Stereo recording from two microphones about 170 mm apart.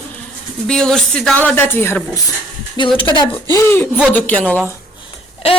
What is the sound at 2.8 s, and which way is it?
Speech, 25° left (ahead or behind).